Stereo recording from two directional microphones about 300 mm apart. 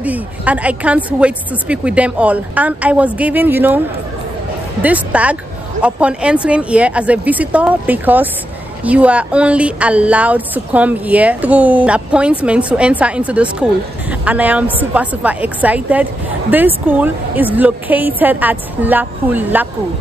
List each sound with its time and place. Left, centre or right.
0.0 s speech: centre
4.8 s speech: centre